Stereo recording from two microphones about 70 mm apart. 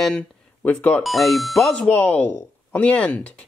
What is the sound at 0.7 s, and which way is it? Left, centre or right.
Speech, centre.